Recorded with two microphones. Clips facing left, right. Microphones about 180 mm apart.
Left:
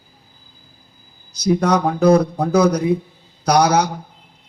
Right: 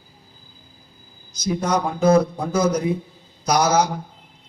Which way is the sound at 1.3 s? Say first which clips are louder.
Left 5 dB; 65° left (ahead or behind).